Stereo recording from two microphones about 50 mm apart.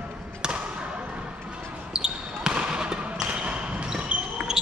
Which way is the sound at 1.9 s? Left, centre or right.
Centre.